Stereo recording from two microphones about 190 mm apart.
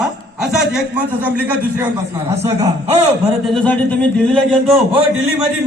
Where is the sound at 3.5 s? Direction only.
5° left (ahead or behind).